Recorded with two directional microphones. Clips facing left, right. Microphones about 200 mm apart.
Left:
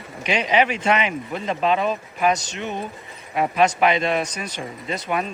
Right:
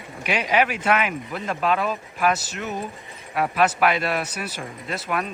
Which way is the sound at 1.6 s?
30° left (ahead or behind).